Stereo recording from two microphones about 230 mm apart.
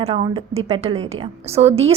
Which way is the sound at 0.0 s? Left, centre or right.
Right.